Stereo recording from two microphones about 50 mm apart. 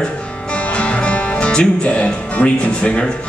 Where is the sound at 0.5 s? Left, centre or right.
Left.